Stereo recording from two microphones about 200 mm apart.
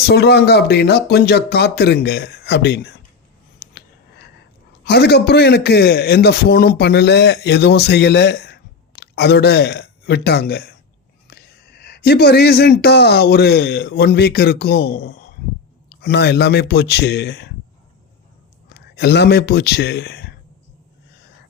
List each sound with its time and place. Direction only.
0.1 s a man's voice: 55° left (ahead or behind)
3.6 s a sound: 55° left (ahead or behind)
4.8 s a man's voice: 55° left (ahead or behind)
18.7 s speech: 55° left (ahead or behind)